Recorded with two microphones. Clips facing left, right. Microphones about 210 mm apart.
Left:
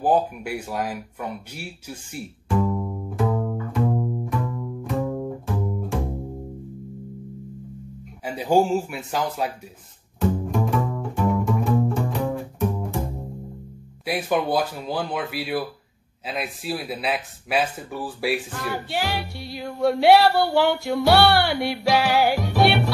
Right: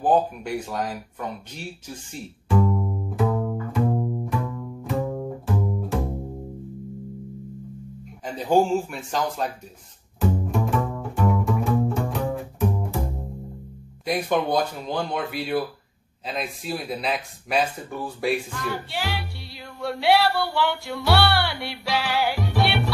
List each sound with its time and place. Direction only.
0.0 s speech: 5° left (ahead or behind)
2.1 s bowed string instrument: 5° left (ahead or behind)
8.3 s speech: 10° left (ahead or behind)
10.2 s bowed string instrument: centre (ahead or behind)
14.0 s speech: 5° left (ahead or behind)
18.5 s music: 45° left (ahead or behind)